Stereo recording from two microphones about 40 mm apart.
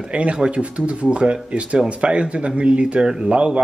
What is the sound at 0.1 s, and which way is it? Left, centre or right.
A man's voice, right.